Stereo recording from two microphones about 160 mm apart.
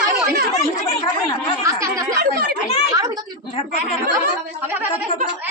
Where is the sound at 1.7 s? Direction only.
20° right (ahead or behind).